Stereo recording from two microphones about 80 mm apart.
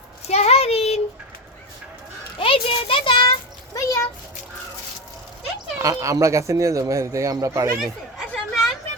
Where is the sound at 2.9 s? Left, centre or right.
Left.